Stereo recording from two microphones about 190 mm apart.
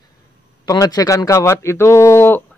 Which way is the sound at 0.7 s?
20° left (ahead or behind).